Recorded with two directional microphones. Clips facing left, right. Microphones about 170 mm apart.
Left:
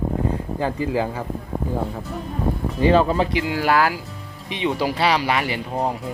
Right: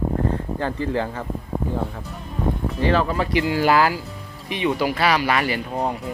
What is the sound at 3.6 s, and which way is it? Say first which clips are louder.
Speech: right 1 dB; centre (ahead or behind).